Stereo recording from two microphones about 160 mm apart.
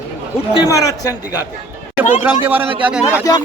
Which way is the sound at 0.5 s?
20° left (ahead or behind).